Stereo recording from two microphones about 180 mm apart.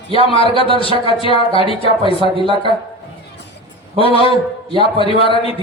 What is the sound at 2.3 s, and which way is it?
Speech, 30° right (ahead or behind).